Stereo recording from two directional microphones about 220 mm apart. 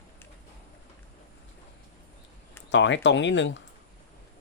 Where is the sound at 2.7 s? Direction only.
55° left (ahead or behind).